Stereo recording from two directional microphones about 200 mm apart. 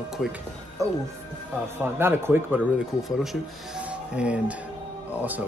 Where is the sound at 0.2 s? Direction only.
5° right (ahead or behind).